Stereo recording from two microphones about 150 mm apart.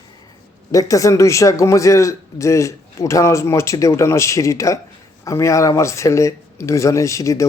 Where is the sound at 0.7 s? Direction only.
20° left (ahead or behind).